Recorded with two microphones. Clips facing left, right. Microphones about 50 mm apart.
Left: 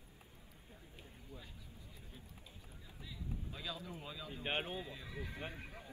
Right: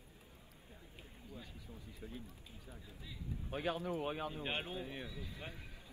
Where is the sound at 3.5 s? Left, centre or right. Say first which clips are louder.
Right 12 dB; right.